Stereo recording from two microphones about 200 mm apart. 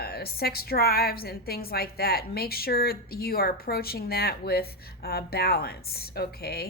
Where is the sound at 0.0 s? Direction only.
50° left (ahead or behind).